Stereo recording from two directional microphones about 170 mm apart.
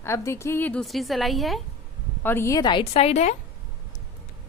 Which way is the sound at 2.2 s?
15° left (ahead or behind).